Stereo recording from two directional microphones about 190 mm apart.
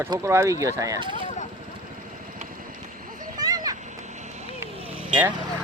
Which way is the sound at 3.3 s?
20° right (ahead or behind).